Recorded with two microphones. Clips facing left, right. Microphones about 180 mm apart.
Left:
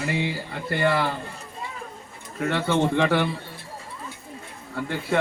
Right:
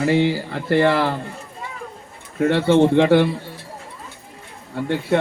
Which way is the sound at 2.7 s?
20° right (ahead or behind).